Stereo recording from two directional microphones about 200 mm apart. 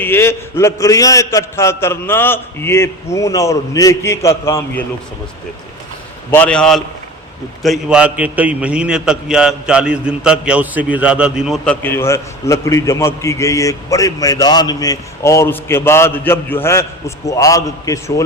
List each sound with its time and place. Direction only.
0.0 s a man's voice: 10° left (ahead or behind)
6.3 s a man's voice: 5° left (ahead or behind)